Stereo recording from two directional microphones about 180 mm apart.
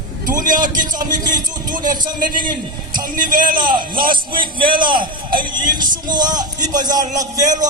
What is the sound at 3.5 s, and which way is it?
A man's voice, 25° right (ahead or behind).